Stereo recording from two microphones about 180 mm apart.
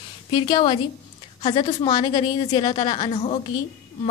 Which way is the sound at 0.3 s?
30° left (ahead or behind).